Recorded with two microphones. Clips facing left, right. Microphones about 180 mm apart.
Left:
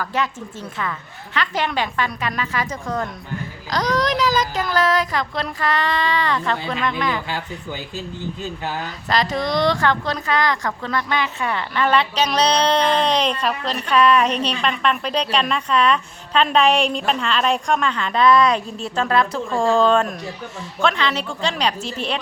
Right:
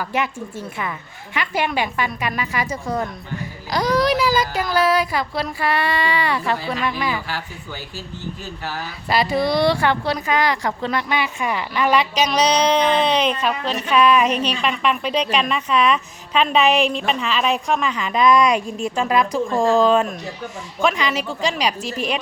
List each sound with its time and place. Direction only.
0.0 s speech: 15° right (ahead or behind)
7.3 s a man's voice: 20° left (ahead or behind)
9.0 s speech: 10° right (ahead or behind)